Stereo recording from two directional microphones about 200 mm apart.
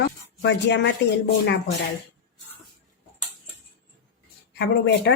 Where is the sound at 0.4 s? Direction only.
60° left (ahead or behind).